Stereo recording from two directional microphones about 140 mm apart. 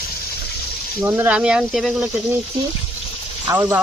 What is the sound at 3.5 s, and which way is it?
Speech, 20° right (ahead or behind).